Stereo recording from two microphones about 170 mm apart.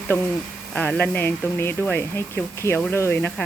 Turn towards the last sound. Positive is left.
turn(degrees=10)  # may be behind; listen again after turning